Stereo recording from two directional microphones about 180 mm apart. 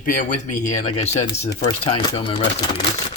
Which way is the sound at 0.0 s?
40° left (ahead or behind).